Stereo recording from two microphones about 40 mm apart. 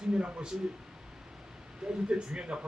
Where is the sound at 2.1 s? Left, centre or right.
Right.